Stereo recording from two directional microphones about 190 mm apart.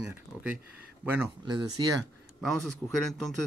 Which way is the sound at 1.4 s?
20° right (ahead or behind).